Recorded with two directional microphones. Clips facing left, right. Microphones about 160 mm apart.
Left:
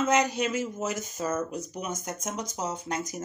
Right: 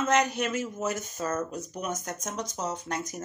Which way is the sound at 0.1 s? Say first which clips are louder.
Left 1 dB; 15° left (ahead or behind).